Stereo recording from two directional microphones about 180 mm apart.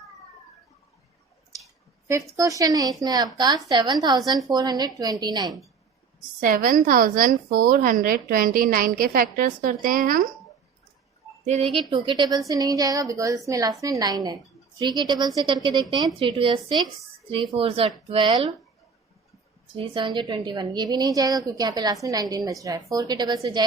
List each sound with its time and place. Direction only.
2.0 s a woman's voice: 15° right (ahead or behind)
4.2 s a woman's voice: centre (ahead or behind)
4.5 s a woman's voice: 20° right (ahead or behind)
6.4 s a woman's voice: 50° right (ahead or behind)
11.4 s a woman's voice: 35° right (ahead or behind)
19.7 s a woman's voice: 30° right (ahead or behind)